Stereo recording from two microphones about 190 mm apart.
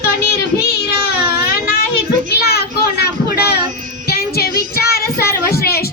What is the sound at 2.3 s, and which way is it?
Children playing, 55° left (ahead or behind).